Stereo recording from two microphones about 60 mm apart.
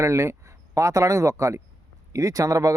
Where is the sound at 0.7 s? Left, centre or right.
Right.